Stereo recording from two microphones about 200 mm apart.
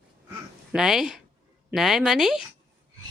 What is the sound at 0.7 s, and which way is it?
Speech, 5° right (ahead or behind).